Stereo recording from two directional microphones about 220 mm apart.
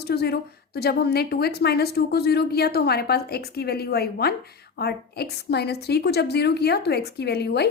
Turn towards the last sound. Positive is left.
turn(degrees=50)  # may be behind; listen again after turning